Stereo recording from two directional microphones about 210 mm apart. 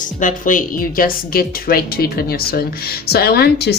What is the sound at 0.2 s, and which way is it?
A woman's voice, 40° left (ahead or behind).